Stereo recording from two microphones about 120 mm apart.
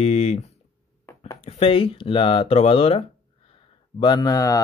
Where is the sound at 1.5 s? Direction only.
50° left (ahead or behind).